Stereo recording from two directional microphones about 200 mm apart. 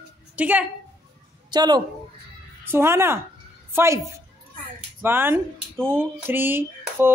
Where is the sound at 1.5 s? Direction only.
20° right (ahead or behind).